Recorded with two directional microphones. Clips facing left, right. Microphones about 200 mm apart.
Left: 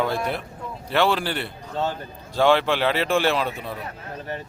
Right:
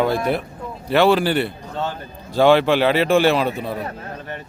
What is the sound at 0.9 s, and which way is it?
A man's voice, 5° right (ahead or behind).